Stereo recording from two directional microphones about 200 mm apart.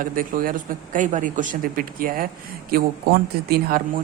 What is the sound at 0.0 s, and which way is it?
Speech, 45° right (ahead or behind).